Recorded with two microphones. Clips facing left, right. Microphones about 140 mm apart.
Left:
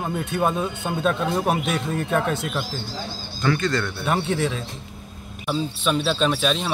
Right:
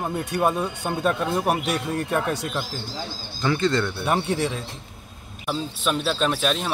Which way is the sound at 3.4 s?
25° right (ahead or behind).